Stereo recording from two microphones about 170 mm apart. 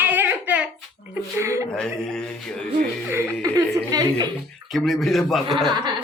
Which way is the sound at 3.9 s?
20° right (ahead or behind).